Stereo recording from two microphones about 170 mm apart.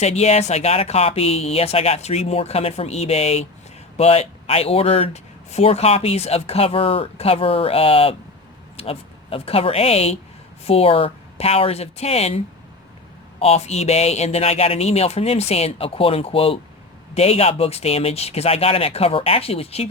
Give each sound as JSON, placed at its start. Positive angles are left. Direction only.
{"t": 0.0, "sound": "speech", "side_deg": 40}
{"t": 13.4, "sound": "speech", "side_deg": 40}